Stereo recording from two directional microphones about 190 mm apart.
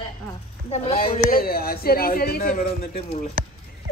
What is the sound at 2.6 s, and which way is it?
Speech, 30° left (ahead or behind).